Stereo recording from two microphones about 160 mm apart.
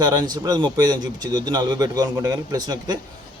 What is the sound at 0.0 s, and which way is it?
A man's voice, 25° right (ahead or behind).